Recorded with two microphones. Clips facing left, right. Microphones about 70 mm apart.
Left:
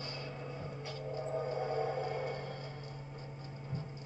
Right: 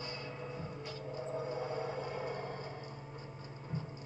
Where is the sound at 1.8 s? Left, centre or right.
Centre.